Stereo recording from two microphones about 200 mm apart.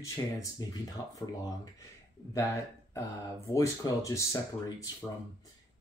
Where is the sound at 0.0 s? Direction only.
15° left (ahead or behind).